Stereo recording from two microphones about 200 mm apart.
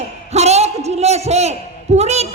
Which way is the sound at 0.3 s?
35° right (ahead or behind).